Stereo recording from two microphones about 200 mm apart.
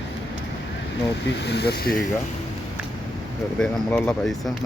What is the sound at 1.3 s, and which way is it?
Speech, 55° left (ahead or behind).